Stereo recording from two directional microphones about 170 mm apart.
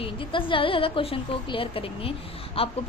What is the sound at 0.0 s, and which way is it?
A woman's voice, 30° left (ahead or behind).